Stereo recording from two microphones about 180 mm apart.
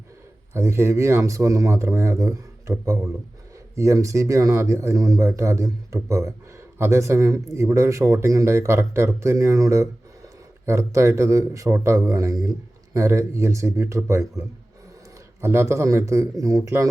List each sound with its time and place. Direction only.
0.5 s speech: 15° right (ahead or behind)